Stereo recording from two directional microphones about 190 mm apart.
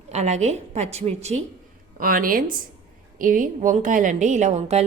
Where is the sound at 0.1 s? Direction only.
35° right (ahead or behind).